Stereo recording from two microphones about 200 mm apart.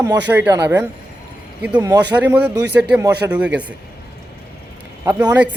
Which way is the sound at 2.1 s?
10° right (ahead or behind).